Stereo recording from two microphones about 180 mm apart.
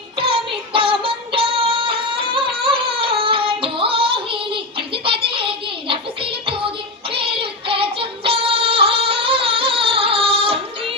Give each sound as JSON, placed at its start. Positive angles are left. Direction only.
{"t": 0.2, "sound": "music", "side_deg": -30}
{"t": 5.0, "sound": "a sound", "side_deg": -30}
{"t": 7.1, "sound": "child singing", "side_deg": -30}